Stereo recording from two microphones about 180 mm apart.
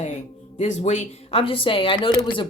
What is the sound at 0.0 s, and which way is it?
Speech, 40° left (ahead or behind).